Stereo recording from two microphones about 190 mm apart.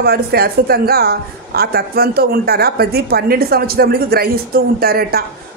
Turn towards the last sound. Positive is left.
turn(degrees=-55)  # may be behind; listen again after turning